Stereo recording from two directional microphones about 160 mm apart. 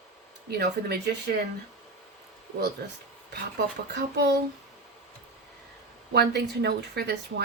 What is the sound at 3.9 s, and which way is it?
Speech, 90° right.